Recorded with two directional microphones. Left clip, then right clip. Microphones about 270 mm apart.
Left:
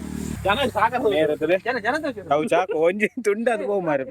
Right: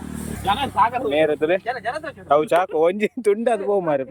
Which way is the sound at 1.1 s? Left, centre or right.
Centre.